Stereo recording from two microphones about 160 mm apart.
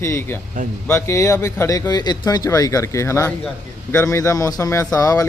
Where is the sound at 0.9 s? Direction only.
15° left (ahead or behind).